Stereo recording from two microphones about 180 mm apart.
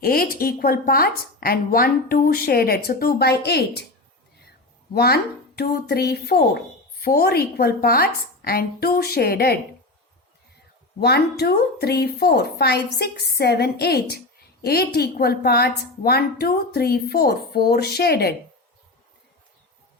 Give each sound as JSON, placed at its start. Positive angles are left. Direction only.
{"t": 0.0, "sound": "speech", "side_deg": 55}
{"t": 4.9, "sound": "speech", "side_deg": 60}
{"t": 11.0, "sound": "speech", "side_deg": 65}